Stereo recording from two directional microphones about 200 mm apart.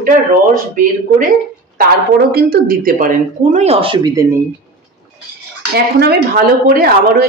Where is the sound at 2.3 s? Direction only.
50° right (ahead or behind); by 4.4 s 15° right (ahead or behind).